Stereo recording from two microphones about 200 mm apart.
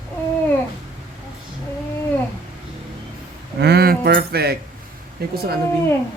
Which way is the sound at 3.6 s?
55° right (ahead or behind).